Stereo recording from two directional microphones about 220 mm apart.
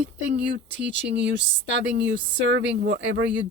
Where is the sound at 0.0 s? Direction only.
55° right (ahead or behind).